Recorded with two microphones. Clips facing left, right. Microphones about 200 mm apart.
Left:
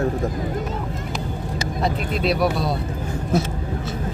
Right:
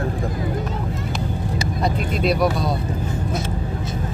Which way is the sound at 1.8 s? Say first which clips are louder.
Right 1 dB; centre (ahead or behind).